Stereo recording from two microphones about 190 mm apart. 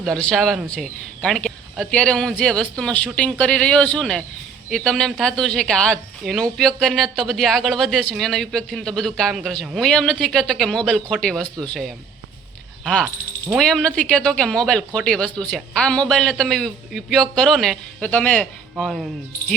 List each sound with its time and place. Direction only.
0.0 s speech: 5° left (ahead or behind)